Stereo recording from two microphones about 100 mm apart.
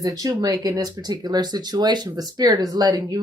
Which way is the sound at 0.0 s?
35° right (ahead or behind).